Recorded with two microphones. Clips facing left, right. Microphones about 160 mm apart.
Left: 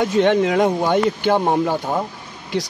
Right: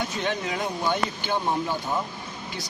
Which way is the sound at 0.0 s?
60° left (ahead or behind).